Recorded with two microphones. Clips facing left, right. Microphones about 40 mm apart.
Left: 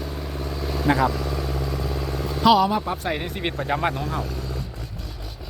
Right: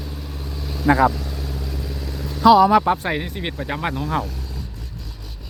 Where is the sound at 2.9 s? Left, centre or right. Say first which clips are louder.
Right 8 dB; right.